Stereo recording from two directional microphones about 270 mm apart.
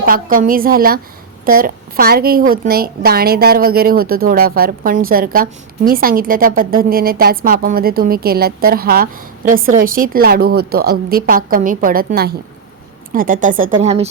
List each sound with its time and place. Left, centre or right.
0.0 s a woman's voice: right